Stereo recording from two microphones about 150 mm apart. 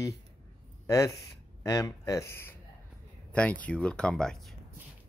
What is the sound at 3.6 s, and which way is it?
Speech, 5° left (ahead or behind).